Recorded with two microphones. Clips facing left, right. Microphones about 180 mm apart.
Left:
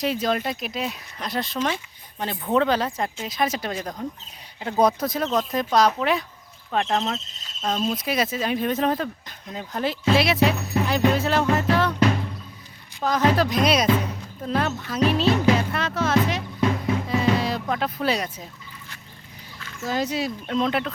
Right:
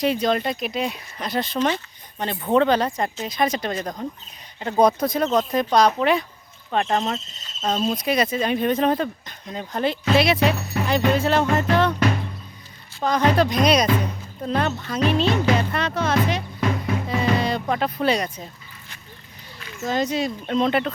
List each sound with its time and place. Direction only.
0.0 s speech: centre (ahead or behind)
7.9 s speech: 5° left (ahead or behind)
13.0 s speech: 5° left (ahead or behind)
19.5 s a sound: 20° right (ahead or behind)
19.9 s speech: 5° left (ahead or behind)